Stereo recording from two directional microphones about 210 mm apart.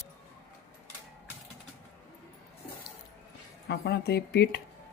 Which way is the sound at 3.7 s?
50° left (ahead or behind).